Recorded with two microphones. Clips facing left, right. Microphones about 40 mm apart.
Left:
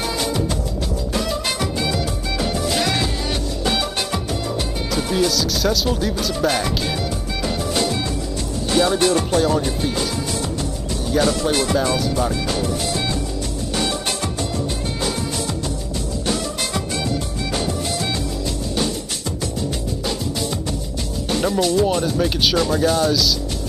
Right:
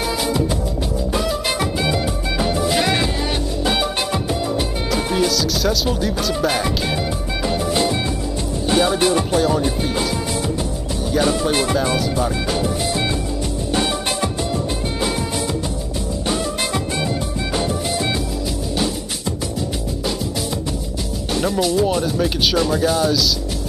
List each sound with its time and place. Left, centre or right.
0.2 s music: centre
1.1 s music: centre
8.6 s speech: centre
11.2 s speech: centre
12.3 s music: centre
16.3 s music: centre
21.3 s speech: centre